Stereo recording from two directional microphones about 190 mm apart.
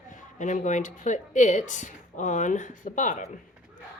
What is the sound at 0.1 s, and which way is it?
Speech, 40° left (ahead or behind).